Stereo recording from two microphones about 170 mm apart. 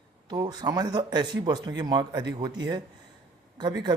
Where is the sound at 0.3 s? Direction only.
25° right (ahead or behind).